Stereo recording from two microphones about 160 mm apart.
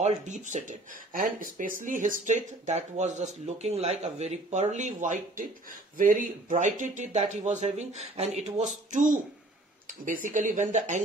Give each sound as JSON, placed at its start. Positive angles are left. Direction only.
{"t": 0.0, "sound": "speech", "side_deg": -50}
{"t": 10.2, "sound": "speech", "side_deg": -55}